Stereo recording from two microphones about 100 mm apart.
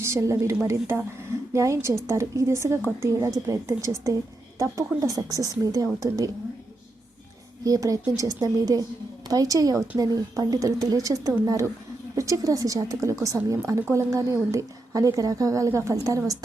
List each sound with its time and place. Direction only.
0.0 s a woman's voice: 30° right (ahead or behind)
7.6 s a woman's voice: 35° right (ahead or behind)